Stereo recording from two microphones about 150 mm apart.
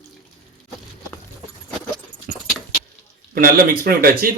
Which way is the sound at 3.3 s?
75° right (ahead or behind).